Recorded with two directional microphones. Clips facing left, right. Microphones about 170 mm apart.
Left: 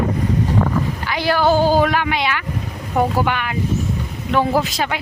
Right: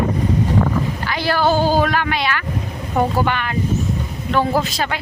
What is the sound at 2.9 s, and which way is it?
A man's voice, 10° left (ahead or behind).